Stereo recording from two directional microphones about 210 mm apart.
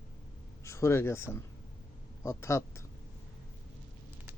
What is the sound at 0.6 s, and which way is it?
A man's voice, 15° left (ahead or behind).